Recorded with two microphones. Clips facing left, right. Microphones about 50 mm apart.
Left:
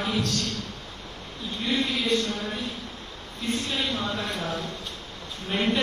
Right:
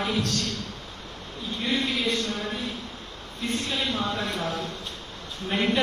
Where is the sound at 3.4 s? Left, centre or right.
Right.